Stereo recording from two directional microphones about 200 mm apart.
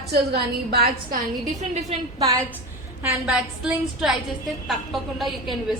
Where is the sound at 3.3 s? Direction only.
5° right (ahead or behind).